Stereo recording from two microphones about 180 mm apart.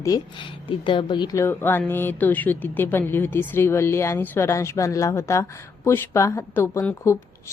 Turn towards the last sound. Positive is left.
turn(degrees=15)  # may be behind; listen again after turning